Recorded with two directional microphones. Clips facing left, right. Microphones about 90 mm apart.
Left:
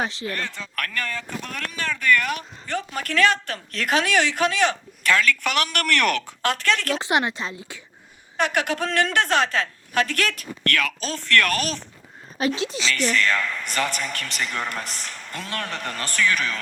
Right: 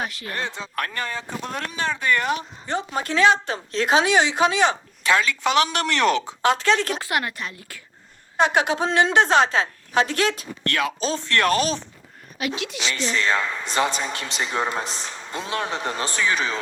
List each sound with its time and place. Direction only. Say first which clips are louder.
0.0 s a woman's voice: left 3 dB; 25° left (ahead or behind)
0.3 s speech: right 1 dB; 20° right (ahead or behind)
7.0 s a woman's voice: left 3 dB; 20° left (ahead or behind)
8.4 s speech: right 3 dB; 20° right (ahead or behind)
12.5 s a woman's voice: left 3 dB; 35° left (ahead or behind)
13.1 s speech: right 2 dB; 20° right (ahead or behind)